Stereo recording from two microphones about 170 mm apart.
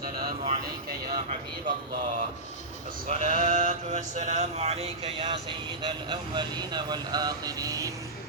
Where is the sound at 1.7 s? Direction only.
55° right (ahead or behind).